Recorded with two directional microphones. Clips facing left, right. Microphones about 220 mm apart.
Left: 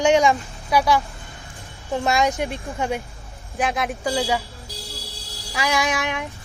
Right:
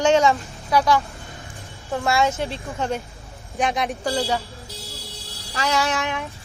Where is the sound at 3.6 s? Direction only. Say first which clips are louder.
Right 1 dB; centre (ahead or behind).